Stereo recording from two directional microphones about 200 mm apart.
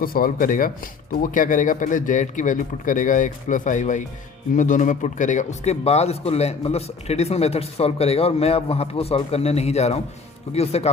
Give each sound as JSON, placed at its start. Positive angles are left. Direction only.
{"t": 0.0, "sound": "a man's voice", "side_deg": 45}